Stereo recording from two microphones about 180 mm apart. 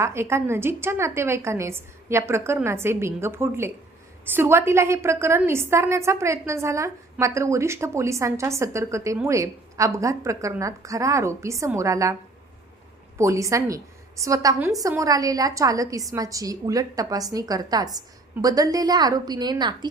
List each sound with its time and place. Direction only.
0.0 s a woman's voice: 15° right (ahead or behind)
13.1 s a woman's voice: 15° right (ahead or behind)